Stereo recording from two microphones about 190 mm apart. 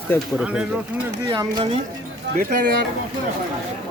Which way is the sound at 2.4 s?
50° right (ahead or behind).